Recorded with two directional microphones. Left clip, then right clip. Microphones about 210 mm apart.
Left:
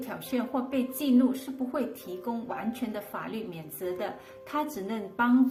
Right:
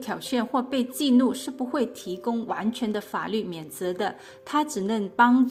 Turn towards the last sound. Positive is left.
turn(degrees=-40)  # may be behind; listen again after turning